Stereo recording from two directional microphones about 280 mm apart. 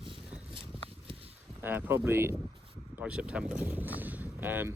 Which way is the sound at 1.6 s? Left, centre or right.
Centre.